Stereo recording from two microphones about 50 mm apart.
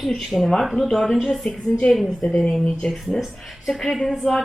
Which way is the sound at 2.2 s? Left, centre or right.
Centre.